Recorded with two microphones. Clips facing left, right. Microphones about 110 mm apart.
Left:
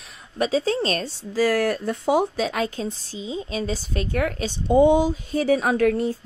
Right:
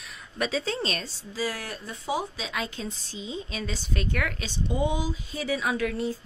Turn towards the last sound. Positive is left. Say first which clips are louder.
# left 8 dB
turn(degrees=50)  # may be behind; listen again after turning